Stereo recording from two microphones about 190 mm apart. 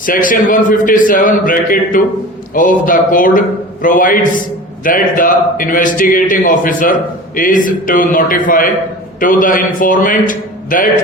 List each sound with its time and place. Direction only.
0.0 s a man's voice: 45° left (ahead or behind)